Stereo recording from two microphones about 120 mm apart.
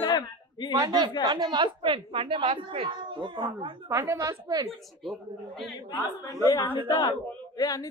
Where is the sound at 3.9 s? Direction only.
25° right (ahead or behind).